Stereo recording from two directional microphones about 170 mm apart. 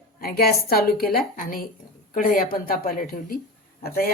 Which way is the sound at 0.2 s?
65° left (ahead or behind).